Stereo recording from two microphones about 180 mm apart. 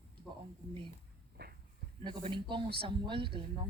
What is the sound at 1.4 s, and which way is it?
Livestock, 60° right (ahead or behind).